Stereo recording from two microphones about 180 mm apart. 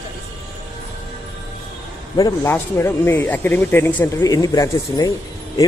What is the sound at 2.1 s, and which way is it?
Speech, 20° left (ahead or behind).